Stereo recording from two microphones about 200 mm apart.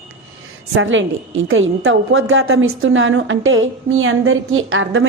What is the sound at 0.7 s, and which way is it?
A woman's voice, 75° right (ahead or behind).